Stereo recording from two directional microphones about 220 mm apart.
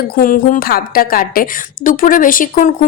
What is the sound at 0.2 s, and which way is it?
A woman's voice, 40° left (ahead or behind).